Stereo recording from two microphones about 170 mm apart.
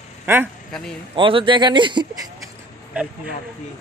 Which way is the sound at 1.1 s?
30° right (ahead or behind).